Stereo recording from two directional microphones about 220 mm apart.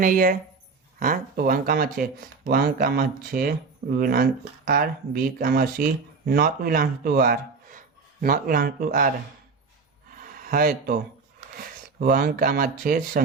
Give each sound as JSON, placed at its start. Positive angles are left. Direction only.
{"t": 0.0, "sound": "speech", "side_deg": -40}
{"t": 10.2, "sound": "a sound", "side_deg": -40}
{"t": 11.5, "sound": "speech", "side_deg": -40}